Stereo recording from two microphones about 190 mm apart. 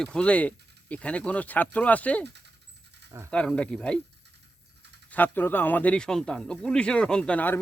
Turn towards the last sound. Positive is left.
turn(degrees=10)  # may be behind; listen again after turning